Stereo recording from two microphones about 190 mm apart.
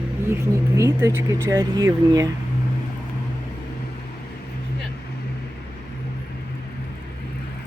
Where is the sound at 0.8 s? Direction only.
15° right (ahead or behind).